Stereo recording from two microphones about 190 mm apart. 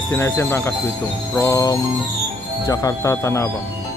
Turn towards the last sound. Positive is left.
turn(degrees=15)  # may be behind; listen again after turning